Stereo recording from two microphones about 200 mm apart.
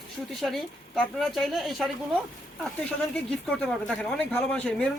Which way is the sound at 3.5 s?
5° left (ahead or behind).